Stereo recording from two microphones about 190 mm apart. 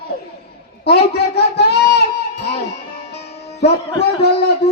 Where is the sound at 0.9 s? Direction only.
60° left (ahead or behind).